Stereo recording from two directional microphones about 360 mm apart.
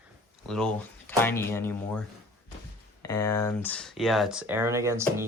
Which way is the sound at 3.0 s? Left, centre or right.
Centre.